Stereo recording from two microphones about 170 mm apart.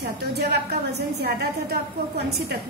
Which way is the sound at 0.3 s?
75° right (ahead or behind).